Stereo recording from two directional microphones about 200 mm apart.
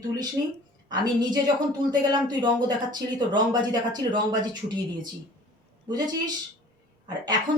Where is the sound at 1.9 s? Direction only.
20° right (ahead or behind).